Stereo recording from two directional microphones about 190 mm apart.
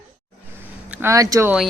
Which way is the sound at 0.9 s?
15° right (ahead or behind).